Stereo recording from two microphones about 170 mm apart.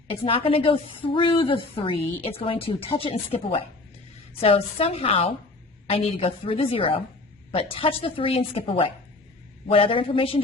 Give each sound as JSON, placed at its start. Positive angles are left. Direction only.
{"t": 0.3, "sound": "a woman's voice", "side_deg": 35}